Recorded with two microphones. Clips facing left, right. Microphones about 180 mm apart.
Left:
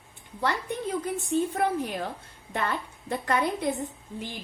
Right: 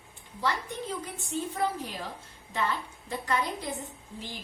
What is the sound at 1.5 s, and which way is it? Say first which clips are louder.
Speech: left 4 dB; 60° left (ahead or behind).